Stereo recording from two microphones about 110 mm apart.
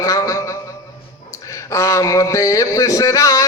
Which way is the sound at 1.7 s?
25° left (ahead or behind).